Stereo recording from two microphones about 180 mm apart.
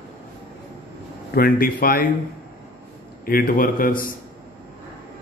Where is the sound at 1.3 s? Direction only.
55° left (ahead or behind).